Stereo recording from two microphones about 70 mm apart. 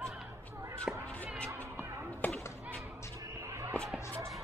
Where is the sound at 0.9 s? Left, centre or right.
Centre.